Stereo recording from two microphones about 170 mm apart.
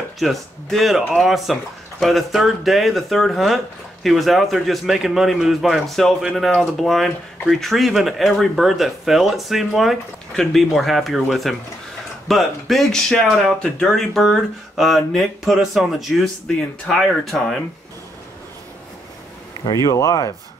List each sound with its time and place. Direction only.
0.2 s a man's voice: centre (ahead or behind)
19.6 s speech: 20° left (ahead or behind)